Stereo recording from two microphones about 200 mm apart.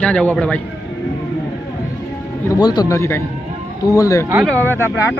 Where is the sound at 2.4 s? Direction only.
20° left (ahead or behind).